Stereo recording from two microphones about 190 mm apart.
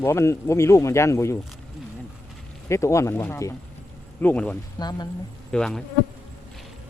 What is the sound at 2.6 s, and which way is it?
Speech, 15° left (ahead or behind).